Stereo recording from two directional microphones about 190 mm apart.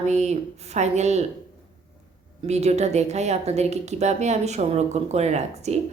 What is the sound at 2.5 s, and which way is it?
A woman's voice, 35° right (ahead or behind).